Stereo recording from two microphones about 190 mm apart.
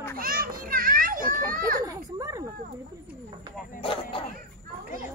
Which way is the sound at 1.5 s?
50° right (ahead or behind).